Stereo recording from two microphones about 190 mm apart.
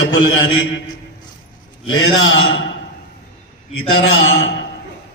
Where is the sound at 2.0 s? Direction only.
85° left.